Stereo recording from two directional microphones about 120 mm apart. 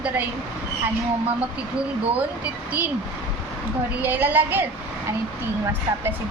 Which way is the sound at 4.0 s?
15° right (ahead or behind).